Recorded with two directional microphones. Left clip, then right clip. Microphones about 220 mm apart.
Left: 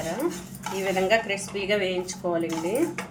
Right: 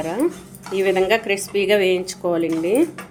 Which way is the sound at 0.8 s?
50° right (ahead or behind).